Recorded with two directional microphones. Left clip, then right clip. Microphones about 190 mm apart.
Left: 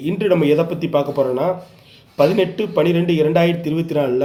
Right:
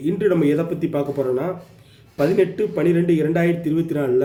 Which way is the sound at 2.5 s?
20° right (ahead or behind).